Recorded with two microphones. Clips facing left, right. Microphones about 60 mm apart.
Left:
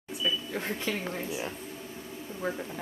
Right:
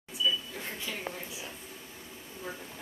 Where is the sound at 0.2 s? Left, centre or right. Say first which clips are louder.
Left 1 dB; left.